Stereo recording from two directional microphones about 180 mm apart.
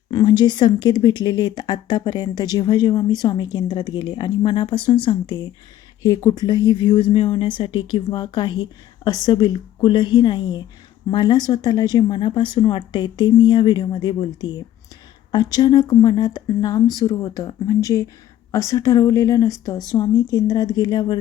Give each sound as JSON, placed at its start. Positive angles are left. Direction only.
{"t": 0.1, "sound": "speech", "side_deg": 25}